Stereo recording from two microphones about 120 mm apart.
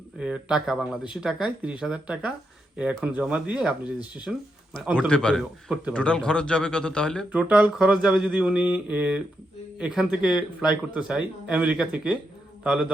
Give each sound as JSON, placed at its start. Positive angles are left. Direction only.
{"t": 0.2, "sound": "speech", "side_deg": -5}
{"t": 4.9, "sound": "a man's voice", "side_deg": 10}
{"t": 5.4, "sound": "speech", "side_deg": -5}
{"t": 5.9, "sound": "a man's voice", "side_deg": 10}
{"t": 7.3, "sound": "speech", "side_deg": -10}